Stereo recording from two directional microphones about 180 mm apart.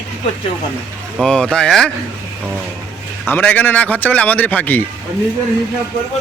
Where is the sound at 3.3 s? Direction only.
10° left (ahead or behind).